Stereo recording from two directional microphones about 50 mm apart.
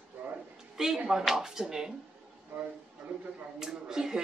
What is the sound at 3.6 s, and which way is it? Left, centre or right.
Speech, centre.